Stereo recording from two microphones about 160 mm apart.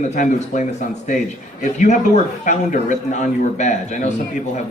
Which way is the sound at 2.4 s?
50° left (ahead or behind).